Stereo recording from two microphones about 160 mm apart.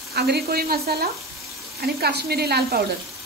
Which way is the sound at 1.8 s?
85° right.